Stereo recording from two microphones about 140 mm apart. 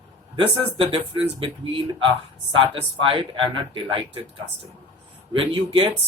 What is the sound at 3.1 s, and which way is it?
Speech, 40° right (ahead or behind).